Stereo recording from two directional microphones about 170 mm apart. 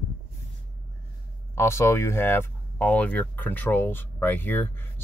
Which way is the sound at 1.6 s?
15° left (ahead or behind).